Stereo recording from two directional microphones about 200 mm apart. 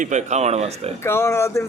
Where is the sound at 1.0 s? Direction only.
15° left (ahead or behind).